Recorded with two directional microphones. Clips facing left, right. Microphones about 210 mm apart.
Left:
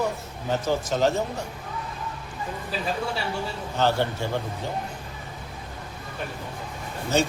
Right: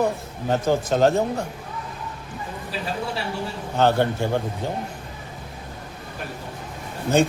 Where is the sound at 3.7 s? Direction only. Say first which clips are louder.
Right 4 dB; 55° right (ahead or behind).